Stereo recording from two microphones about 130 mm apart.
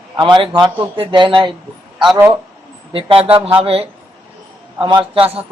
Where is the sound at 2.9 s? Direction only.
45° right (ahead or behind).